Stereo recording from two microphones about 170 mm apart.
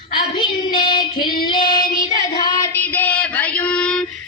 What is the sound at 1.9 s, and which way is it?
Child singing, 50° left (ahead or behind).